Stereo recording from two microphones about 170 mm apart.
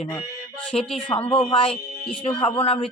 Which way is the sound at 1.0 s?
30° left (ahead or behind).